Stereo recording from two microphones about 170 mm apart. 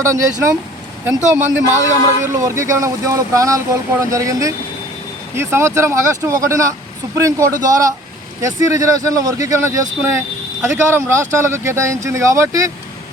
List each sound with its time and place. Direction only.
0.0 s speech: 15° right (ahead or behind)